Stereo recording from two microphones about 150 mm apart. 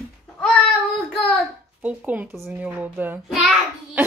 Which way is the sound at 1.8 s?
10° right (ahead or behind).